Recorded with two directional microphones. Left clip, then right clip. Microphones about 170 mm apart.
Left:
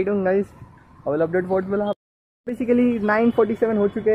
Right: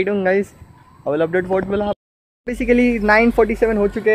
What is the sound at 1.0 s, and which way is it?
A man's voice, 15° right (ahead or behind).